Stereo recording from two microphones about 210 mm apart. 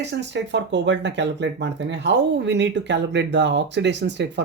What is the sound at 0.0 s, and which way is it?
Speech, 55° right (ahead or behind).